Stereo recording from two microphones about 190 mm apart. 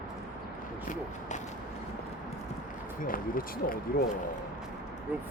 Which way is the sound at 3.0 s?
45° left (ahead or behind).